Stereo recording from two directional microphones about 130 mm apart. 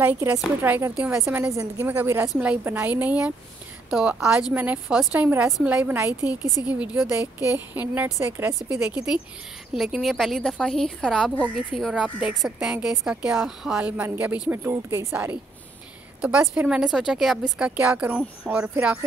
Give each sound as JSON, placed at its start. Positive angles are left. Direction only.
{"t": 0.0, "sound": "a woman's voice", "side_deg": -15}
{"t": 8.9, "sound": "a woman's voice", "side_deg": -5}